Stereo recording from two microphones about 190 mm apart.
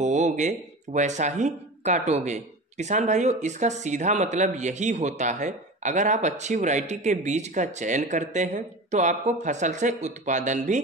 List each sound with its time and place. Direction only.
0.0 s speech: 40° right (ahead or behind)